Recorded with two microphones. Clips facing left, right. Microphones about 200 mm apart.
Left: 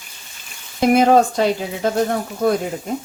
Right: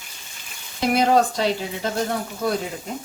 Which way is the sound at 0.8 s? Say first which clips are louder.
Left 5 dB; 50° left (ahead or behind).